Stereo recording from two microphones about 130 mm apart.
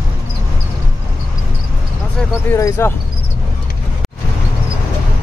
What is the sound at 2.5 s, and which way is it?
Speech, 20° left (ahead or behind).